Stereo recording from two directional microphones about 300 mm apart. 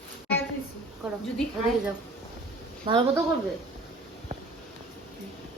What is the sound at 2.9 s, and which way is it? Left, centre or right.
Speech, centre.